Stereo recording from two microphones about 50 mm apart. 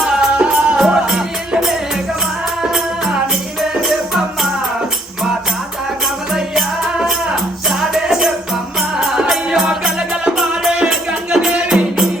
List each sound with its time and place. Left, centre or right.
0.0 s music: centre
6.3 s music: centre
8.0 s music: centre